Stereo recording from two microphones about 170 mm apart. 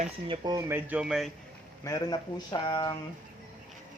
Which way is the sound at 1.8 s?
20° left (ahead or behind).